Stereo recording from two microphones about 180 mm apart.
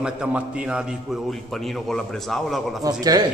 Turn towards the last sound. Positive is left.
turn(degrees=-20)  # may be behind; listen again after turning